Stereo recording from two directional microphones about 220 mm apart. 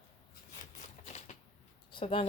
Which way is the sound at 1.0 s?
30° left (ahead or behind).